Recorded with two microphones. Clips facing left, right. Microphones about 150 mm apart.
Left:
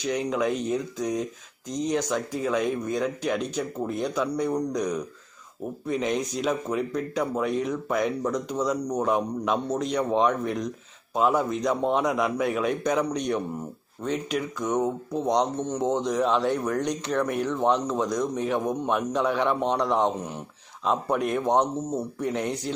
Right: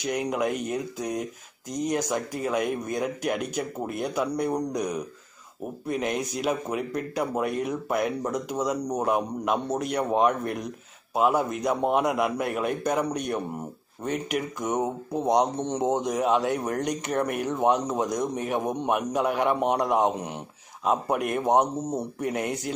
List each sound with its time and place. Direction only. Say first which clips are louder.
0.0 s speech: left 1 dB; 10° right (ahead or behind)
14.0 s speech: even; 55° right (ahead or behind)
14.6 s speech: left 4 dB; 15° right (ahead or behind)